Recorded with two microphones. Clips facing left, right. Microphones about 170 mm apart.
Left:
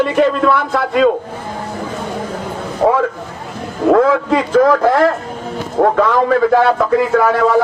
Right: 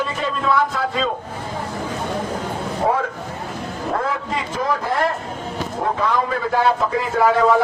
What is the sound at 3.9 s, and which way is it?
A man's voice, 85° left.